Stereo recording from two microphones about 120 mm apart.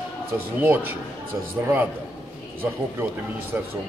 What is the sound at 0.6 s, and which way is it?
Speech, 15° right (ahead or behind).